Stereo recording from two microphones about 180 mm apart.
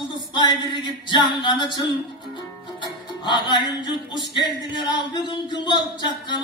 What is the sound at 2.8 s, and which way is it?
Music, 25° left (ahead or behind).